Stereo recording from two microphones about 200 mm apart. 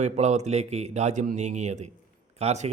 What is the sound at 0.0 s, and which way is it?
A man's voice, 35° right (ahead or behind).